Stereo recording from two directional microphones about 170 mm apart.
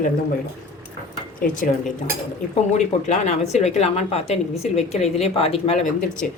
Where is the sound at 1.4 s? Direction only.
55° left (ahead or behind).